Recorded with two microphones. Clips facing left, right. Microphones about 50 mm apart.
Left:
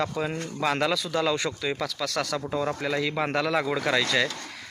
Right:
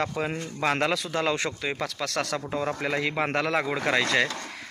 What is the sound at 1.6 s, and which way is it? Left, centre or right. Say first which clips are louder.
Speech: left 1 dB; right.